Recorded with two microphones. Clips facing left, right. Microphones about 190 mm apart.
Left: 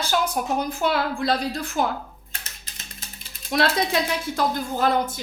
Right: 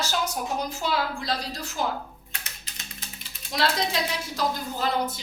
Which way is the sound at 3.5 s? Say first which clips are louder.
Left 4 dB; 55° left (ahead or behind).